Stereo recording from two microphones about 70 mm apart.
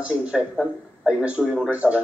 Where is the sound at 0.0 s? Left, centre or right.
Centre.